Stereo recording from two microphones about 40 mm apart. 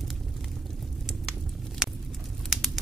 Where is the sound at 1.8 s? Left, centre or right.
Centre.